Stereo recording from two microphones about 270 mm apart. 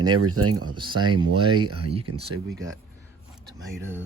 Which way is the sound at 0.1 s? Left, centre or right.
Right.